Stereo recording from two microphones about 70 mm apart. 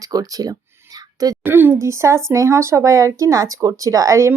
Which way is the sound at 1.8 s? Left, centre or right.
Right.